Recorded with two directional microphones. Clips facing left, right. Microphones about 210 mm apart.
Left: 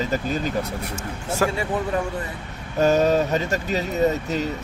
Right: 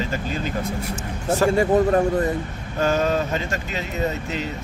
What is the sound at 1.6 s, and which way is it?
Speech, 45° right (ahead or behind).